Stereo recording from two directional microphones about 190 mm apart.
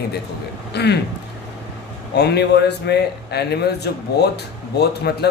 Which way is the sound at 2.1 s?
60° left (ahead or behind).